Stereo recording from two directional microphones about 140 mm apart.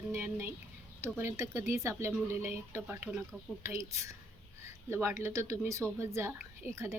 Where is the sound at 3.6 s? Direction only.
20° right (ahead or behind).